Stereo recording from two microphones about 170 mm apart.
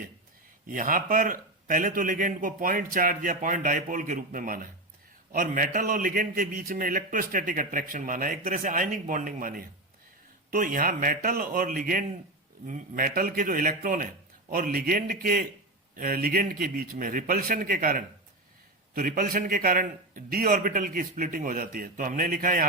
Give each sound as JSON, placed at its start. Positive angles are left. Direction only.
{"t": 0.7, "sound": "a man's voice", "side_deg": -55}